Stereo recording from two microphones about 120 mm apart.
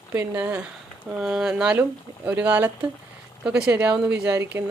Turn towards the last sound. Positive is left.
turn(degrees=-20)  # may be behind; listen again after turning